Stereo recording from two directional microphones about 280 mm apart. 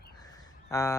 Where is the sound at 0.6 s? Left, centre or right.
Centre.